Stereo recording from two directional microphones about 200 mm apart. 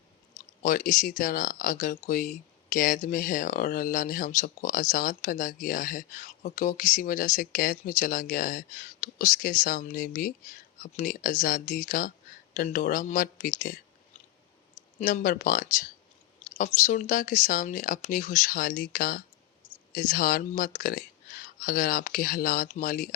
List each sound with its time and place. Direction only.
0.6 s speech: 40° left (ahead or behind)
15.0 s speech: 40° left (ahead or behind)